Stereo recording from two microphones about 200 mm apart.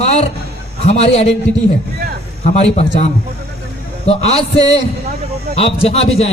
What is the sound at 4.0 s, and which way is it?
A man's voice, 30° left (ahead or behind).